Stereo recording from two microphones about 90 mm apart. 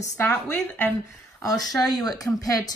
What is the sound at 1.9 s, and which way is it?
Speech, 45° left (ahead or behind).